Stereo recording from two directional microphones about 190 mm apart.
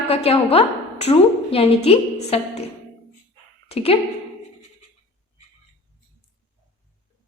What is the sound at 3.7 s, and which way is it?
Speech, 30° left (ahead or behind).